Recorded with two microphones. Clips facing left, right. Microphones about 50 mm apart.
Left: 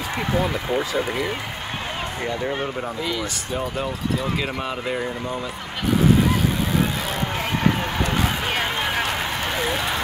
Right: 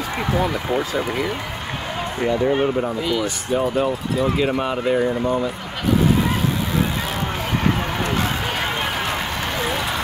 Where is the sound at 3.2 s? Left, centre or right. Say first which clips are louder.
Right 6 dB; centre.